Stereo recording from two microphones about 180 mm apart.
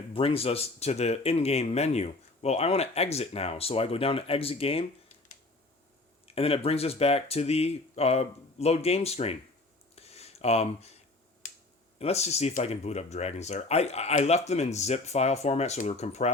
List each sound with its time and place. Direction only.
0.1 s speech: 30° left (ahead or behind)
6.2 s speech: 30° left (ahead or behind)
9.9 s a sound: 35° left (ahead or behind)
11.9 s speech: 35° left (ahead or behind)